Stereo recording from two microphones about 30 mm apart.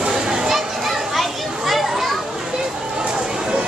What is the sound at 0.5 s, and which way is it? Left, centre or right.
Children playing, centre.